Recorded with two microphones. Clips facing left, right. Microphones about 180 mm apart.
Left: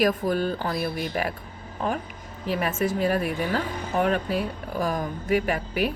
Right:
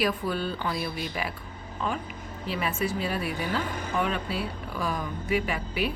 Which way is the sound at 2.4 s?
45° left (ahead or behind).